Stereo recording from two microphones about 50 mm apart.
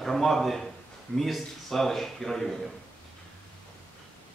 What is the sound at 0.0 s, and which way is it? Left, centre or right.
A man's voice, centre.